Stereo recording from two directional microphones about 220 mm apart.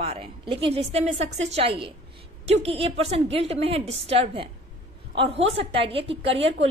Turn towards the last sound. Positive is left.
turn(degrees=-25)  # may be behind; listen again after turning